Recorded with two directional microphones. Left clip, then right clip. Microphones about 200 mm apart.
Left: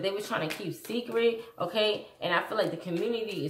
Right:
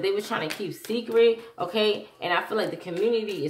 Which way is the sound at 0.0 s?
30° right (ahead or behind).